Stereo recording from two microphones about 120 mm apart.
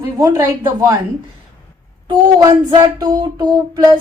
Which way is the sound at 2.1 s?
35° right (ahead or behind).